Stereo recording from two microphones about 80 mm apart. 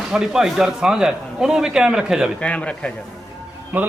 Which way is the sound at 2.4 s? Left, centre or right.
Centre.